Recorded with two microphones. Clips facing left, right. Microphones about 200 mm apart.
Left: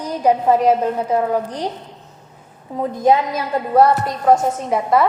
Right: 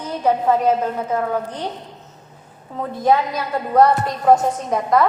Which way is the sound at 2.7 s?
10° left (ahead or behind).